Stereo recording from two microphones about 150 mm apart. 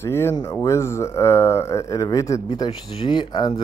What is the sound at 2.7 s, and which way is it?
Speech, 35° left (ahead or behind).